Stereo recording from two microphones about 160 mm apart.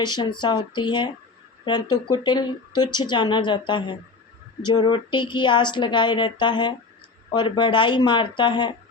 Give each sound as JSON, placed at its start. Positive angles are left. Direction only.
{"t": 0.0, "sound": "speech", "side_deg": 30}